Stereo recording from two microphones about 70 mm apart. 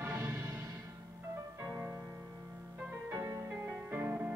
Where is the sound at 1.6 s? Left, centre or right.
Centre.